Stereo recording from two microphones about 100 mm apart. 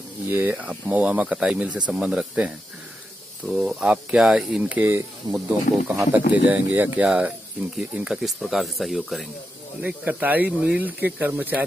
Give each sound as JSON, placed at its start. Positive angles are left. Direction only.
{"t": 0.3, "sound": "speech", "side_deg": -20}
{"t": 9.8, "sound": "speech", "side_deg": -15}